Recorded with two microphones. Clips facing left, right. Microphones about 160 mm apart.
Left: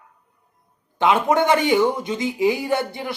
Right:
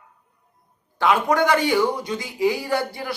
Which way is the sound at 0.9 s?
20° left (ahead or behind).